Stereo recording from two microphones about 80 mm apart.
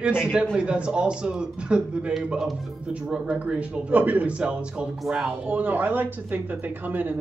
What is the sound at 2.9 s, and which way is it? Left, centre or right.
A man's voice, centre.